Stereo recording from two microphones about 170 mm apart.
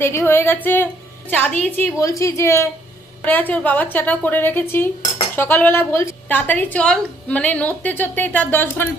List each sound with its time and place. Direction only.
0.0 s a woman's voice: 15° left (ahead or behind)